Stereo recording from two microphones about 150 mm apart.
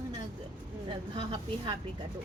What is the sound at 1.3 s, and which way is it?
Speech, 35° right (ahead or behind).